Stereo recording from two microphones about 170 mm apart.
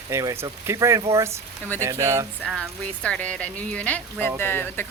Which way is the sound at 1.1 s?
15° right (ahead or behind).